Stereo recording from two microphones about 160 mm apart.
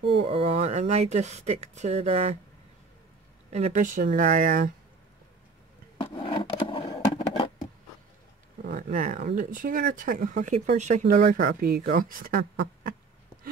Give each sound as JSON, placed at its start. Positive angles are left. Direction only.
{"t": 0.0, "sound": "speech", "side_deg": -35}
{"t": 3.4, "sound": "speech", "side_deg": -45}
{"t": 6.1, "sound": "a sound", "side_deg": 35}
{"t": 8.6, "sound": "speech", "side_deg": -55}